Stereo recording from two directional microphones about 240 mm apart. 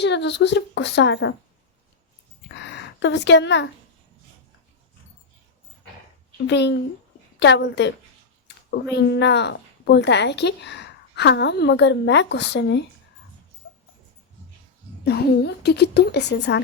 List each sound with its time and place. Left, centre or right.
0.0 s a woman's voice: left
2.6 s a woman's voice: left
6.5 s a woman's voice: left
15.0 s a woman's voice: left